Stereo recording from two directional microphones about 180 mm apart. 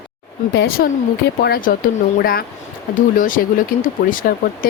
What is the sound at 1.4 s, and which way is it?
Speech, 55° left (ahead or behind).